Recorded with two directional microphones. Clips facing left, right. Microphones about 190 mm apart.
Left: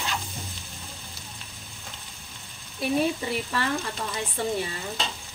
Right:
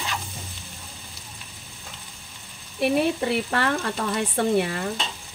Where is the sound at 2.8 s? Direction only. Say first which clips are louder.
Right 3 dB; 65° right (ahead or behind).